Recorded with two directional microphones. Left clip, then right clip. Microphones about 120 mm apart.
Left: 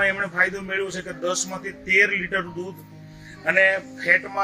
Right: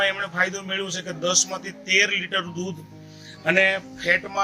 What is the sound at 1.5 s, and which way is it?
Speech, 15° right (ahead or behind).